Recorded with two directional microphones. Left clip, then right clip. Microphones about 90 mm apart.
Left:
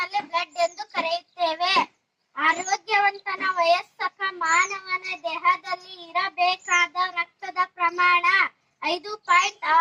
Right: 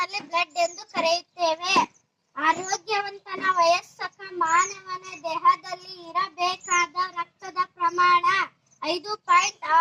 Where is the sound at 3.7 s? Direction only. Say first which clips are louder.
Left 1 dB; 25° left (ahead or behind).